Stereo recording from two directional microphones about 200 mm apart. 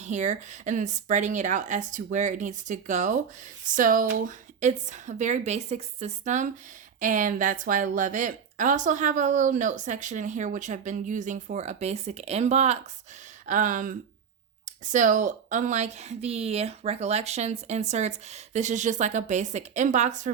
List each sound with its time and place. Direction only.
0.0 s speech: 35° right (ahead or behind)